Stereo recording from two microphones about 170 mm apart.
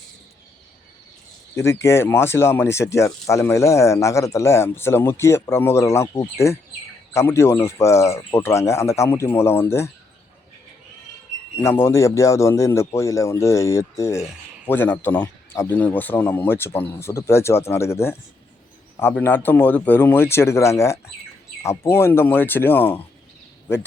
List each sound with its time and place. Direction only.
1.5 s speech: 15° left (ahead or behind)
11.6 s speech: 15° left (ahead or behind)